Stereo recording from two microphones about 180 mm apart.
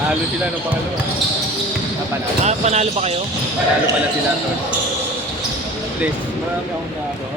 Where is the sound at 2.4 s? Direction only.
35° right (ahead or behind).